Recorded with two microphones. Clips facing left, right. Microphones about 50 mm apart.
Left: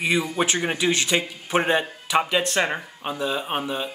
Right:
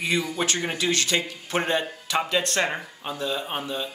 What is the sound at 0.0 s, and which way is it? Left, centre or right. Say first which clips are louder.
Speech: left 3 dB; centre.